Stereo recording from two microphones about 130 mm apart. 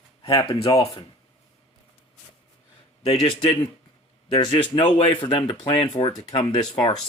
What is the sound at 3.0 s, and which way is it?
Speech, 45° left (ahead or behind).